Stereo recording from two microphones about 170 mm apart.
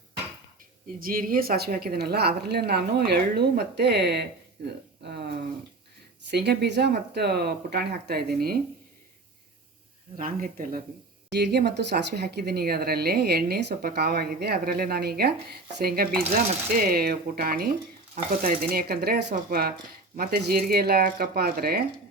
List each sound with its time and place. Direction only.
0.9 s a woman's voice: 55° right (ahead or behind)
10.2 s speech: 55° right (ahead or behind)
11.3 s speech: 75° right (ahead or behind)